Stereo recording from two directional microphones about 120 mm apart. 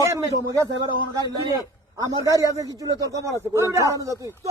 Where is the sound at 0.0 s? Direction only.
25° right (ahead or behind).